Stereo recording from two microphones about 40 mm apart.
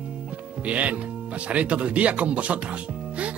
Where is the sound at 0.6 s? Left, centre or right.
Right.